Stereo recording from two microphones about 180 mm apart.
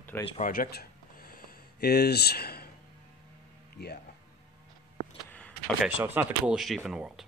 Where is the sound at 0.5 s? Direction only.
60° left (ahead or behind).